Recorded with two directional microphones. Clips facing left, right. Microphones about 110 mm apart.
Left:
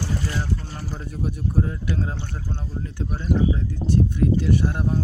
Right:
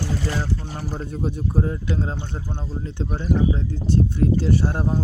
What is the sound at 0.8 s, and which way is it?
Speech, 30° right (ahead or behind).